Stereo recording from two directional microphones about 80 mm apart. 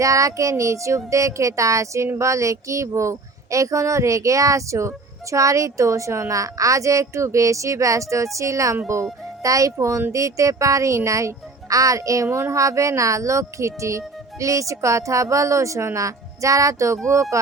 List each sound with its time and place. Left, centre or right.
0.0 s a child's voice: right